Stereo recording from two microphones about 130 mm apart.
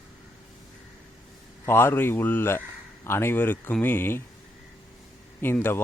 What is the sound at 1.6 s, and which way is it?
A man's voice, 20° left (ahead or behind).